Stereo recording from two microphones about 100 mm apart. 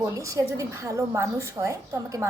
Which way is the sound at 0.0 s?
30° right (ahead or behind).